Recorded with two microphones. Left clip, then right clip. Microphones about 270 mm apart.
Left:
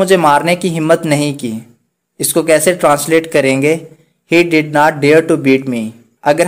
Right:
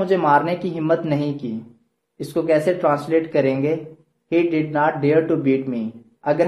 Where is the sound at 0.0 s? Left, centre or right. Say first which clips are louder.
Left 7 dB; left.